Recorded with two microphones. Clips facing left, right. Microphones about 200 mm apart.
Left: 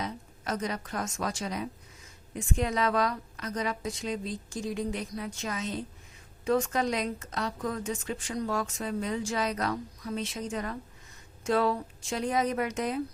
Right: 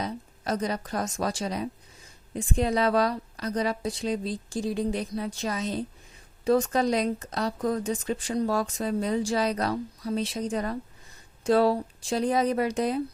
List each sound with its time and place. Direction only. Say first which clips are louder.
0.0 s a woman's voice: right 4 dB; 35° right (ahead or behind)